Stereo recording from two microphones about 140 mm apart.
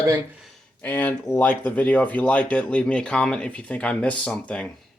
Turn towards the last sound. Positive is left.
turn(degrees=5)  # may be behind; listen again after turning